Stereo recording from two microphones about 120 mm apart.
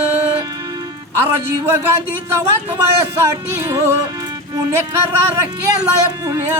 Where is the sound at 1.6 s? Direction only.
20° right (ahead or behind).